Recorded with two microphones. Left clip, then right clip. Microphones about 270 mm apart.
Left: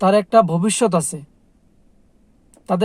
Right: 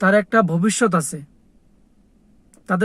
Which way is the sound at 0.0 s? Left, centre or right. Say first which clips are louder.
Left 2 dB; left.